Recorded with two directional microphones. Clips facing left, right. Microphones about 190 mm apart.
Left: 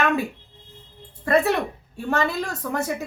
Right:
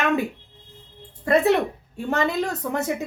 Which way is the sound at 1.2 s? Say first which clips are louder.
Right 2 dB; 20° right (ahead or behind).